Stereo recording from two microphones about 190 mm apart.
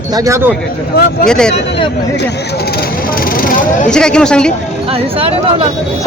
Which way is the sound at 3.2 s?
50° left (ahead or behind).